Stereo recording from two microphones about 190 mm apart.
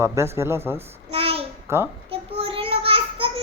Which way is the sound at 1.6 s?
15° right (ahead or behind).